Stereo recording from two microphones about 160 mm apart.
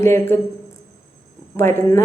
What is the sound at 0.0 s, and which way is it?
Speech, 15° left (ahead or behind).